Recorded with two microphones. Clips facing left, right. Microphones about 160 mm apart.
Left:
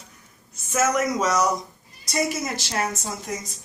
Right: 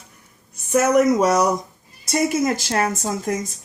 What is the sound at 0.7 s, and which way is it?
A woman's voice, 60° right (ahead or behind).